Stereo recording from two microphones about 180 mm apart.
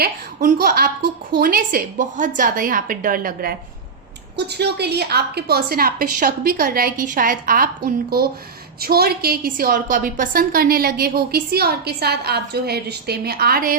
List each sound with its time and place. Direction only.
0.0 s a woman's voice: 55° right (ahead or behind)
4.4 s a woman's voice: 65° right (ahead or behind)